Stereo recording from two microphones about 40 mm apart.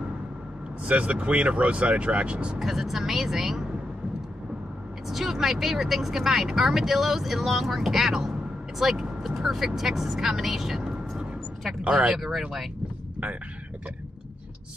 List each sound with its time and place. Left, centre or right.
0.8 s speech: right
2.6 s speech: centre
5.0 s speech: centre
11.9 s speech: centre
12.2 s speech: centre